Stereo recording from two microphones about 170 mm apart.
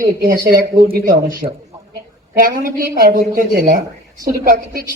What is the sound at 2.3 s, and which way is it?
A man's voice, 55° right (ahead or behind).